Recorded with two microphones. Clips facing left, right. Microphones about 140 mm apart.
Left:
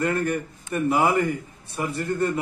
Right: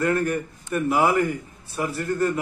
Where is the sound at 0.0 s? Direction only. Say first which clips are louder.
Right 1 dB; 15° left (ahead or behind).